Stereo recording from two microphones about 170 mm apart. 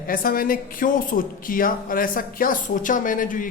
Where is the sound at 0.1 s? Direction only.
55° left (ahead or behind).